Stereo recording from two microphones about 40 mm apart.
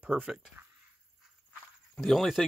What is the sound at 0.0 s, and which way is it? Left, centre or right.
Speech, right.